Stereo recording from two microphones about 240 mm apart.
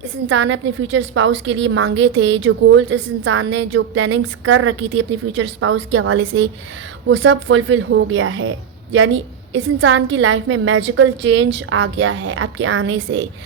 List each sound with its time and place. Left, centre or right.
0.3 s a woman's voice: right